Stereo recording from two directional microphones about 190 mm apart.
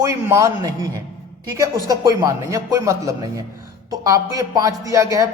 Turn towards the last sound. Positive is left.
turn(degrees=-15)  # may be behind; listen again after turning